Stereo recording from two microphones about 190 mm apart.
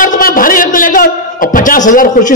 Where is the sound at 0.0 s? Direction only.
45° left (ahead or behind).